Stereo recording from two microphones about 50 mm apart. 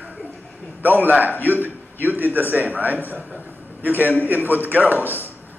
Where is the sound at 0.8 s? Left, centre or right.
Right.